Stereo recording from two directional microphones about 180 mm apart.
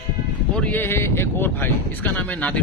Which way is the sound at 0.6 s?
10° left (ahead or behind).